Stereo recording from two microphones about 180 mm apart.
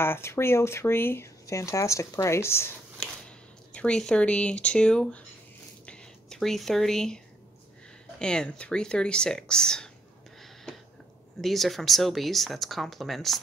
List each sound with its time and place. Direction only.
0.0 s speech: 15° left (ahead or behind)
5.9 s a sound: 5° left (ahead or behind)
8.2 s speech: 5° left (ahead or behind)
11.4 s speech: centre (ahead or behind)